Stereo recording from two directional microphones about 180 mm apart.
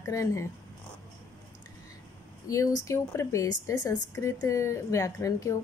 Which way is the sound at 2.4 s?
20° left (ahead or behind).